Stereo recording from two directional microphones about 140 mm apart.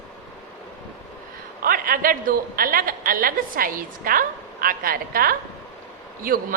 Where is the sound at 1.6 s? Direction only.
90° right.